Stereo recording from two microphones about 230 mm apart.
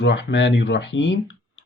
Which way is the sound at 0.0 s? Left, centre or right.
Left.